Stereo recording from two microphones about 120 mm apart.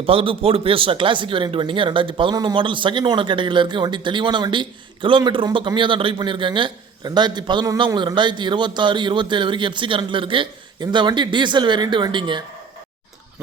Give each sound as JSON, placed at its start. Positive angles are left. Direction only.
{"t": 0.0, "sound": "a man's voice", "side_deg": -50}